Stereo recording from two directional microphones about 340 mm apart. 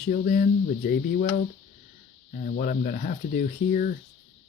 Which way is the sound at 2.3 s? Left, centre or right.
Left.